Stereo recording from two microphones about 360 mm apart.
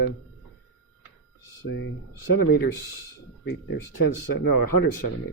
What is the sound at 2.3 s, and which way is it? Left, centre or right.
Speech, left.